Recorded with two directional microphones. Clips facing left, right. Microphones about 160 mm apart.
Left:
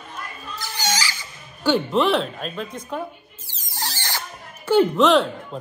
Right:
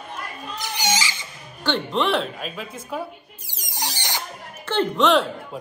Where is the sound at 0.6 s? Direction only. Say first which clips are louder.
Right 1 dB; 20° right (ahead or behind).